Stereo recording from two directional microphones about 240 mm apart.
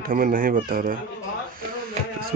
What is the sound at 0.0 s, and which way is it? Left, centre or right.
Speech, right.